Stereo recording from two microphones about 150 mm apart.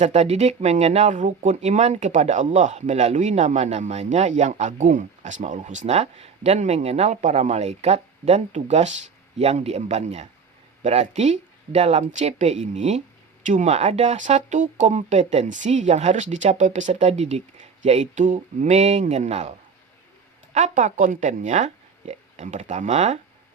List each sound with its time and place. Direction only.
0.0 s speech: 45° right (ahead or behind)